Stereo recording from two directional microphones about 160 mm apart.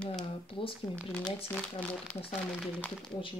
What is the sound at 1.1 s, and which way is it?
Speech, 5° left (ahead or behind).